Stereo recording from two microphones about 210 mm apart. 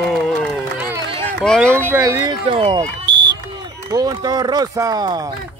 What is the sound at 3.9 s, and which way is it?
Speech, 15° right (ahead or behind).